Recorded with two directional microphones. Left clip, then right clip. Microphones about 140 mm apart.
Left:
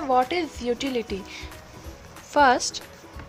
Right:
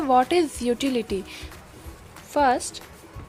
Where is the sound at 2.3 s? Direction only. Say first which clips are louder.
Left 2 dB; 15° right (ahead or behind).